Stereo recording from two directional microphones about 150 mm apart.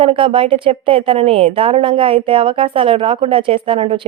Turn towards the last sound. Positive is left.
turn(degrees=-40)  # may be behind; listen again after turning